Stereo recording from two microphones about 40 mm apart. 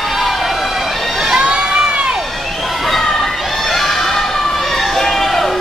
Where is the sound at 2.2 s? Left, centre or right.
Centre.